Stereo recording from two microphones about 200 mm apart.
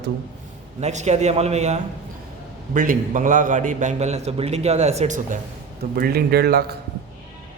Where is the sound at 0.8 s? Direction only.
35° right (ahead or behind).